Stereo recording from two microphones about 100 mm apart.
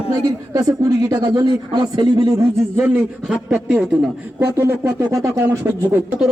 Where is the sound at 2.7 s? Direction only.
20° right (ahead or behind).